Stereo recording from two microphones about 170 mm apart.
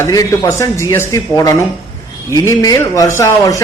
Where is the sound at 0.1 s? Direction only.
20° left (ahead or behind).